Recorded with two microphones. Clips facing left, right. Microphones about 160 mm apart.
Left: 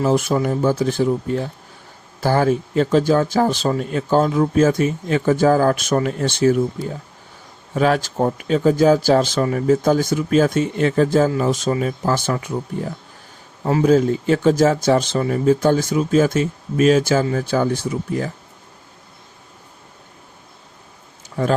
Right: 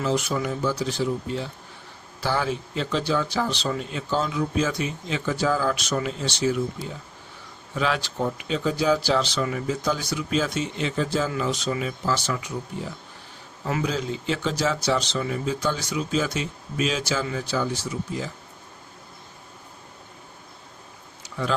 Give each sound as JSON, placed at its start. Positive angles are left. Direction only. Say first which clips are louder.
{"t": 0.0, "sound": "speech", "louder": "left 7 dB", "side_deg": 50}
{"t": 21.2, "sound": "tick-tock", "louder": "left 8 dB", "side_deg": 50}